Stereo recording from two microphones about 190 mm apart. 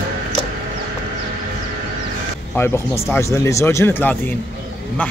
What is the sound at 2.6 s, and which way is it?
Speech, 10° left (ahead or behind).